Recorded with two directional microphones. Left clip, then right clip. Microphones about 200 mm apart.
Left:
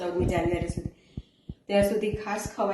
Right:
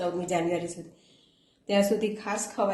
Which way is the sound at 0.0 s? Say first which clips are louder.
Left 1 dB; 50° right (ahead or behind).